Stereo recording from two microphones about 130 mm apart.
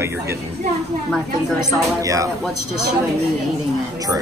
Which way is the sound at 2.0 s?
25° right (ahead or behind).